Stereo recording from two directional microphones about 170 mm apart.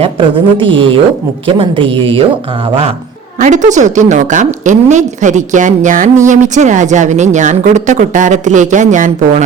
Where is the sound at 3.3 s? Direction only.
45° right (ahead or behind).